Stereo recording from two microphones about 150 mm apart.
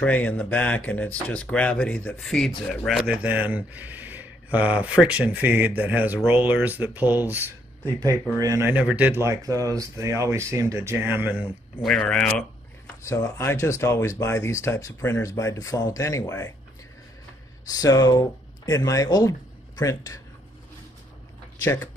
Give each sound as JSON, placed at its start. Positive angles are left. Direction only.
{"t": 0.0, "sound": "speech", "side_deg": 10}
{"t": 3.1, "sound": "speech", "side_deg": -10}
{"t": 9.2, "sound": "speech", "side_deg": -20}
{"t": 11.8, "sound": "speech", "side_deg": 5}
{"t": 12.8, "sound": "speech", "side_deg": 20}
{"t": 17.6, "sound": "speech", "side_deg": 25}